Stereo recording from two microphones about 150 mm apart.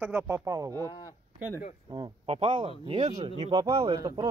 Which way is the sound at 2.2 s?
40° right (ahead or behind).